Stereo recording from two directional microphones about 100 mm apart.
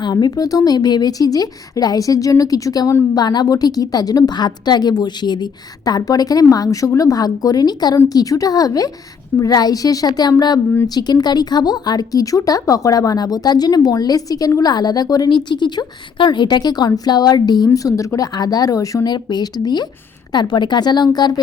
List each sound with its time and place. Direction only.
0.0 s a woman's voice: 45° left (ahead or behind)